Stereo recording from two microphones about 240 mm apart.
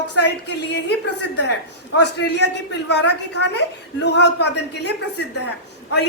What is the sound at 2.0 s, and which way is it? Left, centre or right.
Speech, left.